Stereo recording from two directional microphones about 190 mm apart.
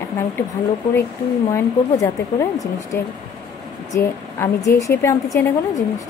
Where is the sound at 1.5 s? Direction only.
15° left (ahead or behind).